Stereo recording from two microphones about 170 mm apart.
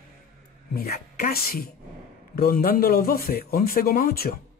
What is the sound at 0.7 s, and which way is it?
A man's voice, 60° left (ahead or behind).